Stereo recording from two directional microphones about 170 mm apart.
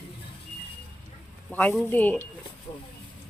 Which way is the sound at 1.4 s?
10° left (ahead or behind).